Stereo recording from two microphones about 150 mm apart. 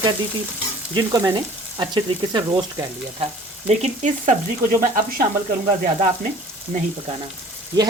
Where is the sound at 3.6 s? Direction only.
50° right (ahead or behind).